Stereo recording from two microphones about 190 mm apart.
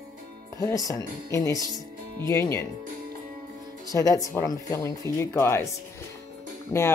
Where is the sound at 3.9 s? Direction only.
20° left (ahead or behind).